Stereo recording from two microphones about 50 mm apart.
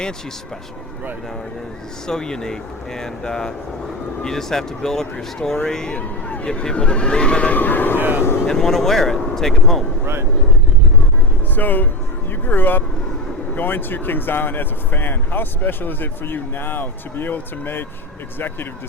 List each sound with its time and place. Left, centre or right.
2.0 s speech: centre
6.0 s speech: left
7.5 s speech: left
8.4 s speech: centre
11.5 s speech: left